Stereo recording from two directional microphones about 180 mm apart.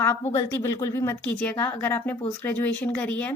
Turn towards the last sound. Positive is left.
turn(degrees=10)  # may be behind; listen again after turning